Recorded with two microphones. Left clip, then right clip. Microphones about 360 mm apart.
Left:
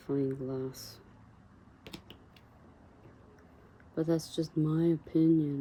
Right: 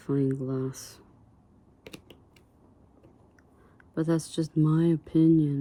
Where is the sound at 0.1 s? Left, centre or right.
Right.